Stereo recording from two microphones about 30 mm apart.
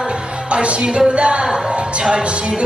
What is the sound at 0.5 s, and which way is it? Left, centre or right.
Music, right.